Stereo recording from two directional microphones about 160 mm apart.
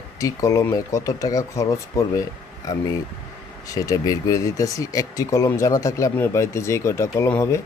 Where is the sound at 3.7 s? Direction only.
20° left (ahead or behind).